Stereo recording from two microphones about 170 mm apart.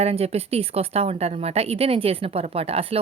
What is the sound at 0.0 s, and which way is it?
A woman's voice, 35° right (ahead or behind).